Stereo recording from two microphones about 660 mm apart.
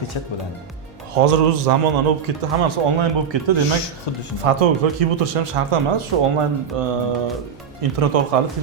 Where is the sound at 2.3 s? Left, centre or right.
Right.